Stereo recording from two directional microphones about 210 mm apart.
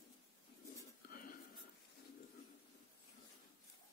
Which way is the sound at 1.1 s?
45° left (ahead or behind).